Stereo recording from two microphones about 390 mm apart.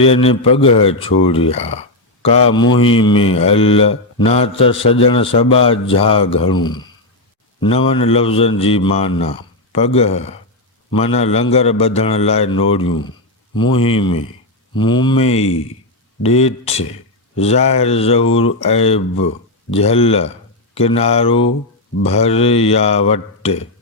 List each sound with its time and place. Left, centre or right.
0.0 s speech: centre